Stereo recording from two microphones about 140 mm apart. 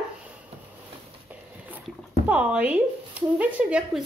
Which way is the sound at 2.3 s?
10° right (ahead or behind).